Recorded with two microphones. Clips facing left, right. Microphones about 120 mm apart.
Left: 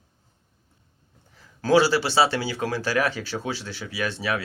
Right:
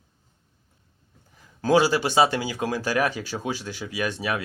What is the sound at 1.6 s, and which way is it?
Speech, 15° right (ahead or behind).